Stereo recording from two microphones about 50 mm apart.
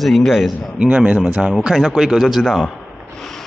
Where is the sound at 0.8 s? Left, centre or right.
Right.